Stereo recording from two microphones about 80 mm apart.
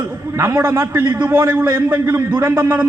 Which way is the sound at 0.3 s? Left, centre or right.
Right.